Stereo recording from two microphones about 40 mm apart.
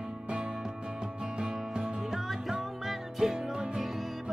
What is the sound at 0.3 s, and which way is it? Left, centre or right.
Music, right.